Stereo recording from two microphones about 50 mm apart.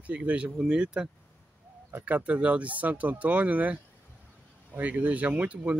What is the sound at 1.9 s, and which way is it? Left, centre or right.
Speech, right.